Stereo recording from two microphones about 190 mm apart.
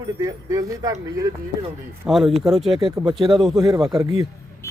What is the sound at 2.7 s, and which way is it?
Speech, 25° right (ahead or behind).